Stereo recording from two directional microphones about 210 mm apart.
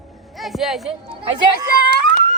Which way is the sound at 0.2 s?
Centre (ahead or behind).